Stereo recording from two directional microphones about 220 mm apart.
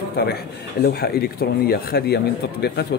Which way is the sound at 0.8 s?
45° left (ahead or behind).